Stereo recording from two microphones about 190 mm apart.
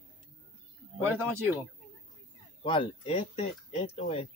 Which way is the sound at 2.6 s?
25° left (ahead or behind).